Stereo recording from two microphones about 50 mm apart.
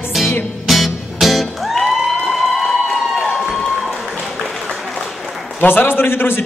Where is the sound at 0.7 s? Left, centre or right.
Centre.